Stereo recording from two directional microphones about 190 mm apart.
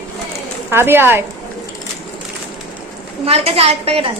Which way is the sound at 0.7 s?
10° right (ahead or behind).